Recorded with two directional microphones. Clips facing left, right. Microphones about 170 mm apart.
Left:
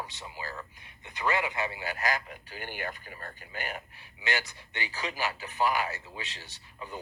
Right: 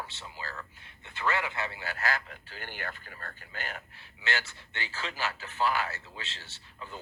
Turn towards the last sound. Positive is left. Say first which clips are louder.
# left 2 dB
turn(degrees=15)  # may be behind; listen again after turning